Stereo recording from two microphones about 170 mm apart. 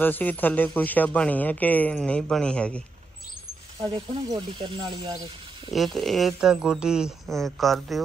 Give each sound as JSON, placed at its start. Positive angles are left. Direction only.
{"t": 0.0, "sound": "speech", "side_deg": 10}
{"t": 3.8, "sound": "speech", "side_deg": -30}
{"t": 5.7, "sound": "speech", "side_deg": 0}